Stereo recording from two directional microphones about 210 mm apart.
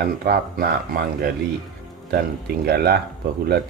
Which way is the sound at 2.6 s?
50° right (ahead or behind).